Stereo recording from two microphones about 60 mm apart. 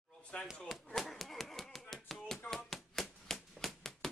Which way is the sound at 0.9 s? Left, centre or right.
Centre.